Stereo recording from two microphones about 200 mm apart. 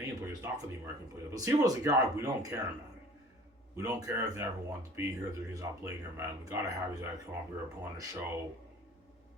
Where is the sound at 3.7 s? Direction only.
15° right (ahead or behind).